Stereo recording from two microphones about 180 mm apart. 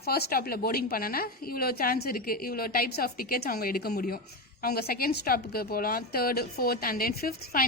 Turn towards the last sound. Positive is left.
turn(degrees=55)  # may be behind; listen again after turning